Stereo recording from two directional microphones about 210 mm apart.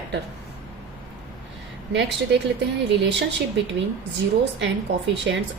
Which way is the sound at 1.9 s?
60° right (ahead or behind).